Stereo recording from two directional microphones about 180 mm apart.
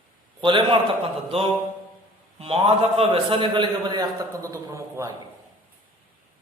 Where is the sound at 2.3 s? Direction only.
30° right (ahead or behind); by 5.1 s 15° right (ahead or behind).